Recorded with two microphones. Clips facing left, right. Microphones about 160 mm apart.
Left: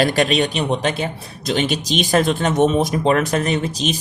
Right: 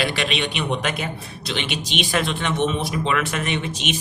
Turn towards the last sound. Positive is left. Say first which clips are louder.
# left 5 dB
turn(degrees=40)  # may be behind; listen again after turning